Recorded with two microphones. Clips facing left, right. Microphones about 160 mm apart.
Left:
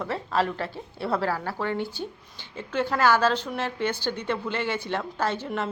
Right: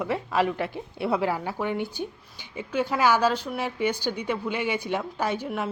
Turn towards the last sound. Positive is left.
turn(degrees=-10)  # may be behind; listen again after turning